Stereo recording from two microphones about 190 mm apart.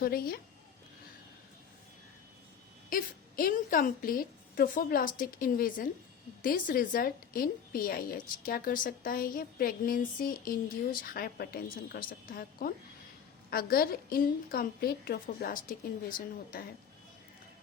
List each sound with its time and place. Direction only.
0.0 s a woman's voice: 50° left (ahead or behind)
2.9 s a woman's voice: 50° left (ahead or behind)